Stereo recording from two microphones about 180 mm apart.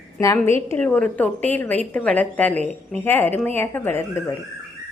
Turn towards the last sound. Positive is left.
turn(degrees=15)  # may be behind; listen again after turning